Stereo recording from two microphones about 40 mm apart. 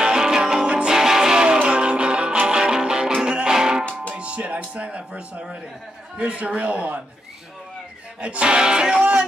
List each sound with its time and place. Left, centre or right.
0.0 s music: centre
4.1 s music: right
4.4 s speech: right
8.2 s speech: right